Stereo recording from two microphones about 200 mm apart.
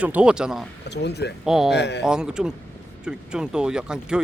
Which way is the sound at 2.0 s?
5° right (ahead or behind).